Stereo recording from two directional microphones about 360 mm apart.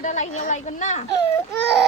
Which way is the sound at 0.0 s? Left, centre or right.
Left.